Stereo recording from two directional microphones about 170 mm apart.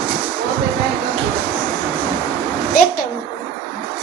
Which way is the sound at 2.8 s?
55° left (ahead or behind).